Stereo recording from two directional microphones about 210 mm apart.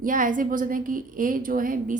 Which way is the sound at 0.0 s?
40° right (ahead or behind).